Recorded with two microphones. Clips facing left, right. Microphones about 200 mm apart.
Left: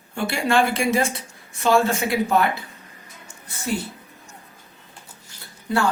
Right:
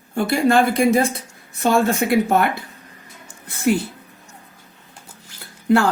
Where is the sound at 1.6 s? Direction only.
55° right (ahead or behind).